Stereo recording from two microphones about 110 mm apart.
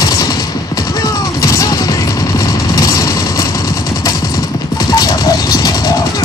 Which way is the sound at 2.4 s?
30° left (ahead or behind).